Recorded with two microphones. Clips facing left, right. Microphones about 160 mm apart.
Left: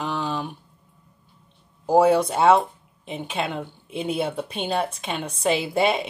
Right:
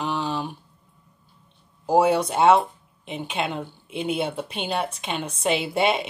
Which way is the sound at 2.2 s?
35° left (ahead or behind).